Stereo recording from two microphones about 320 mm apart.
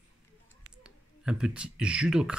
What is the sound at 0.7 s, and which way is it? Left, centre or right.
Speech, centre.